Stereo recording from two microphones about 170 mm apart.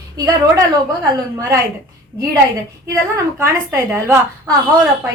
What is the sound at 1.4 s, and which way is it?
Speech, 20° right (ahead or behind).